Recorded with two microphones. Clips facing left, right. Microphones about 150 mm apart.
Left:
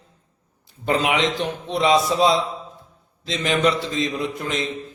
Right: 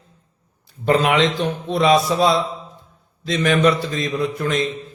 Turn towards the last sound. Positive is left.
turn(degrees=20)  # may be behind; listen again after turning